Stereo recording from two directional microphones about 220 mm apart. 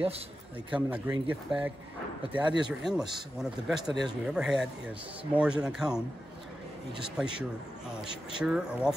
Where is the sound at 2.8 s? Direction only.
Centre (ahead or behind).